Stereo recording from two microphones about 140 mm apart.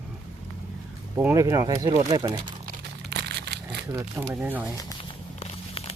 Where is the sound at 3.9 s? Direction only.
15° right (ahead or behind).